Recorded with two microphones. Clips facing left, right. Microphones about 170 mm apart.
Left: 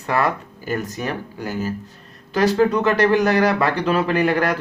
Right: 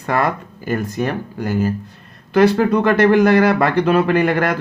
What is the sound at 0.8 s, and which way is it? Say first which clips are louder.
Speech: right 6 dB; 55° right (ahead or behind).